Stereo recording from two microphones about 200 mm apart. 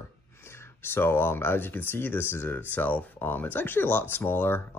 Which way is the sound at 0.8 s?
10° left (ahead or behind).